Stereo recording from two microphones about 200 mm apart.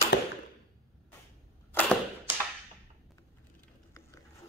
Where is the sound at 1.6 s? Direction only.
10° left (ahead or behind).